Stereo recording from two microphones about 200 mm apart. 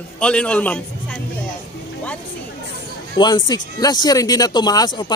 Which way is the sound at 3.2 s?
20° left (ahead or behind).